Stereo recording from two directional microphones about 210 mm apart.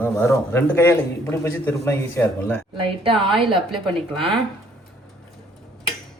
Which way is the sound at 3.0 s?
25° right (ahead or behind).